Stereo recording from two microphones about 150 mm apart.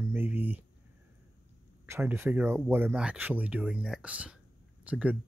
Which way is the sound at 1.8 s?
15° right (ahead or behind).